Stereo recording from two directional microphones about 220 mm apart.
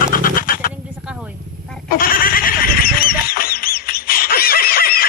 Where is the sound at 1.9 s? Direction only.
40° left (ahead or behind).